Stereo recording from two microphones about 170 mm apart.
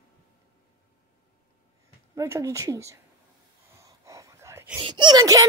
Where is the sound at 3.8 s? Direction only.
20° right (ahead or behind).